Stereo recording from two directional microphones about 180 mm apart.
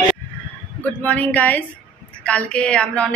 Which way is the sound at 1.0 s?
10° left (ahead or behind).